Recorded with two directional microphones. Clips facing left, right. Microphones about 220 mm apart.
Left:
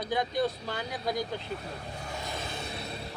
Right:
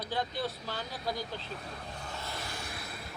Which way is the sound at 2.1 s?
15° left (ahead or behind).